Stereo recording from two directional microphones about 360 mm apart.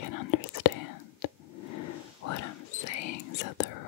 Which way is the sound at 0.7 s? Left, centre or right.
Left.